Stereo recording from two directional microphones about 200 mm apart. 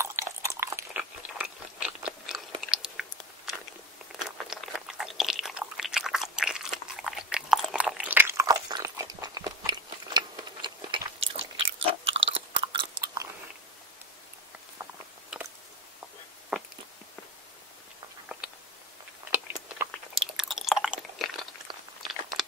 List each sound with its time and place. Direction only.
0.0 s a sound: 15° right (ahead or behind)
2.6 s chewing: centre (ahead or behind)
4.1 s crunch: centre (ahead or behind)
9.7 s biting: 20° right (ahead or behind)
12.1 s chewing: 70° right (ahead or behind)
12.7 s biting: 20° right (ahead or behind)
16.5 s a sound: centre (ahead or behind)
19.3 s chewing: 5° right (ahead or behind)